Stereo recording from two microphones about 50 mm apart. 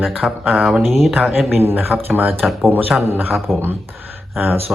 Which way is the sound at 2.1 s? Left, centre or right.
Right.